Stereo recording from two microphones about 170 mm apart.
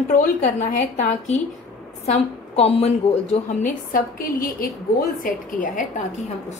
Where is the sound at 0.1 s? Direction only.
50° left (ahead or behind).